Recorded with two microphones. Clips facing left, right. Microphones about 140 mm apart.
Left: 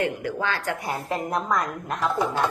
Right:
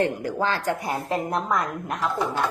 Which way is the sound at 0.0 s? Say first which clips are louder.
Right 2 dB; 35° right (ahead or behind).